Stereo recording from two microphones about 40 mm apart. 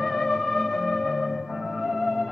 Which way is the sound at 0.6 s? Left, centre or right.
Centre.